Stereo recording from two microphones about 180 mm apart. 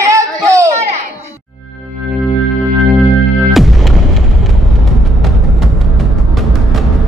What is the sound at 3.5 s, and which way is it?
Music, centre (ahead or behind).